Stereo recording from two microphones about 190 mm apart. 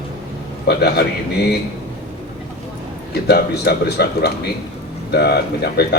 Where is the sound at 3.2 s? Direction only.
55° left (ahead or behind).